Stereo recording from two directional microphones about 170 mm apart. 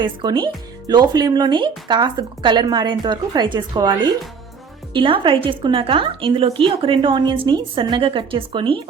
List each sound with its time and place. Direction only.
0.0 s speech: 30° right (ahead or behind)
4.9 s speech: 30° right (ahead or behind)